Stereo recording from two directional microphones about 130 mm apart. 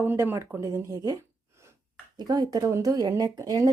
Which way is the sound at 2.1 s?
35° right (ahead or behind).